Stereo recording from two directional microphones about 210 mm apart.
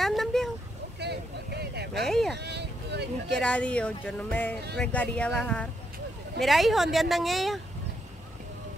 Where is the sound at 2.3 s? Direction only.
55° right (ahead or behind).